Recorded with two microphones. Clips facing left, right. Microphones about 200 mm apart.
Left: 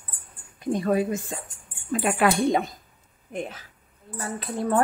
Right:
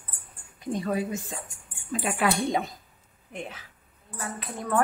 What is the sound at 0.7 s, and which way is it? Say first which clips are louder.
A woman's voice: left 5 dB; 55° left (ahead or behind).